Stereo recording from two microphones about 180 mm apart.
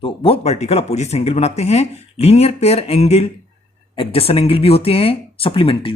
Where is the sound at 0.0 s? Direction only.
30° left (ahead or behind).